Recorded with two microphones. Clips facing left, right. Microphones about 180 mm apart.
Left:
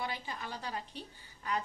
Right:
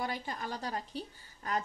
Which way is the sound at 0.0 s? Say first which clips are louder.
Right 3 dB; 45° right (ahead or behind).